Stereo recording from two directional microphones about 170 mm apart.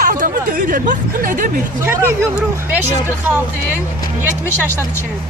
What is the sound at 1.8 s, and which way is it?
Speech, 15° right (ahead or behind).